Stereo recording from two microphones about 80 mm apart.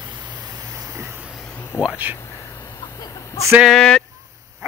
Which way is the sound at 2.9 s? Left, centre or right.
Left.